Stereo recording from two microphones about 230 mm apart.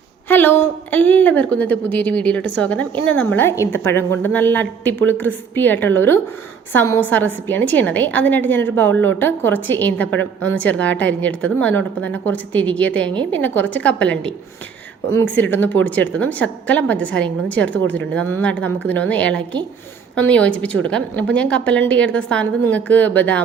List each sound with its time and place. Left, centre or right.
0.3 s a woman's voice: centre